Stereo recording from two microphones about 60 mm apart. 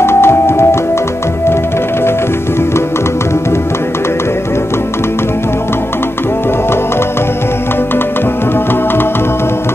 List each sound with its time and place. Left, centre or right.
0.0 s music: left